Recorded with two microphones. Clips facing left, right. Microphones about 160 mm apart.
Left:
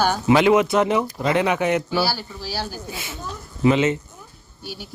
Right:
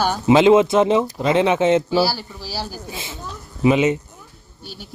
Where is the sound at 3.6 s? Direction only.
15° right (ahead or behind).